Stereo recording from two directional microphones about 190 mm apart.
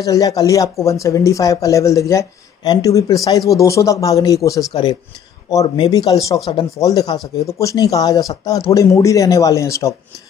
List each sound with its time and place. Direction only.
0.0 s speech: 20° left (ahead or behind)